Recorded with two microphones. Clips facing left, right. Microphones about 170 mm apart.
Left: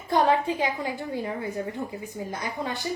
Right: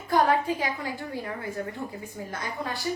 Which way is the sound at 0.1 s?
25° left (ahead or behind).